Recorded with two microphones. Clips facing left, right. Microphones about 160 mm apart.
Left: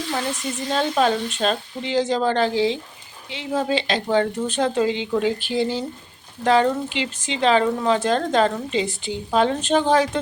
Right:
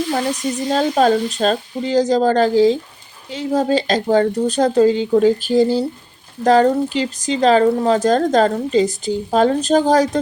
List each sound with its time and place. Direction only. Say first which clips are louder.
0.1 s speech: right 6 dB; 40° right (ahead or behind)